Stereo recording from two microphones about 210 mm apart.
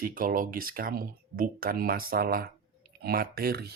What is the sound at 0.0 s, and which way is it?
Speech, 40° right (ahead or behind).